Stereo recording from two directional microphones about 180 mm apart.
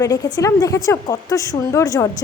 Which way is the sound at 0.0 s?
20° left (ahead or behind).